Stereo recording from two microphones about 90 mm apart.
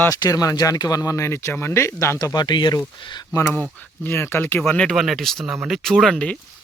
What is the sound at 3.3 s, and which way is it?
Speech, 35° left (ahead or behind).